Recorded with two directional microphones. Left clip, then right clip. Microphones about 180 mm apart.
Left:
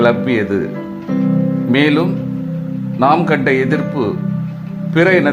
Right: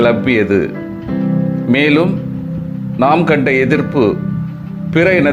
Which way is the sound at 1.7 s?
15° right (ahead or behind).